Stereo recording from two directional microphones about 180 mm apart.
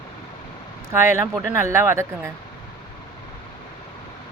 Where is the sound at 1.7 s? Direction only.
15° right (ahead or behind).